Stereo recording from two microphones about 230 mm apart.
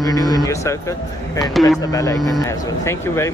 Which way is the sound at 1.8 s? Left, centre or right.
Centre.